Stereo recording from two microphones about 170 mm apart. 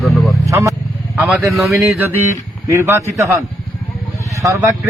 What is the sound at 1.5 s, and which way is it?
Speech, centre (ahead or behind).